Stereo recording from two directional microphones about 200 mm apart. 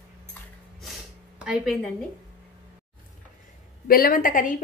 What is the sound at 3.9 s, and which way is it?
Speech, 45° left (ahead or behind).